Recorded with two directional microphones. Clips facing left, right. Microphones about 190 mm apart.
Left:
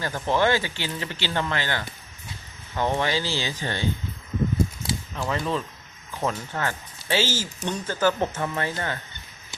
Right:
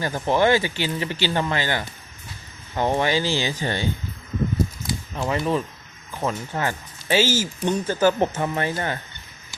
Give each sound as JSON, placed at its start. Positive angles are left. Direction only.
{"t": 0.0, "sound": "speech", "side_deg": -15}
{"t": 2.8, "sound": "speech", "side_deg": -15}
{"t": 5.1, "sound": "speech", "side_deg": -15}